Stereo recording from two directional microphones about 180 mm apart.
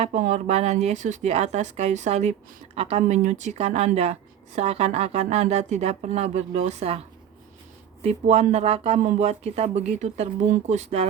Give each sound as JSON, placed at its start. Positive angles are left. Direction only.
{"t": 0.0, "sound": "a woman's voice", "side_deg": -40}
{"t": 8.0, "sound": "a woman's voice", "side_deg": -35}